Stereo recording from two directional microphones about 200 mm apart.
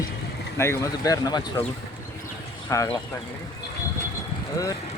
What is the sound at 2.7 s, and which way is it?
Speech, 15° left (ahead or behind).